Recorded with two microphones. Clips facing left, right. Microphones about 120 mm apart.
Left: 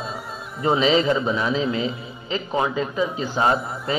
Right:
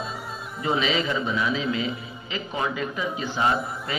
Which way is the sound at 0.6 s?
30° left (ahead or behind).